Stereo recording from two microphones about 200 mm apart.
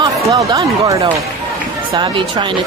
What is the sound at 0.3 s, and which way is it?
Speech, 15° right (ahead or behind).